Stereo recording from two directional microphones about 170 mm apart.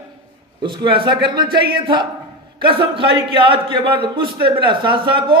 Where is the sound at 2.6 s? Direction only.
30° right (ahead or behind).